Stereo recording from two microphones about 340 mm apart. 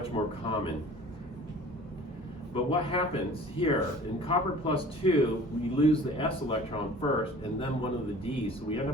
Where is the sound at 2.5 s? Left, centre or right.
Centre.